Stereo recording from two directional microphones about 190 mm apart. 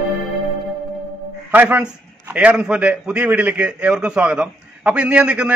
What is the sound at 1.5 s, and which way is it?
A man's voice, 10° right (ahead or behind).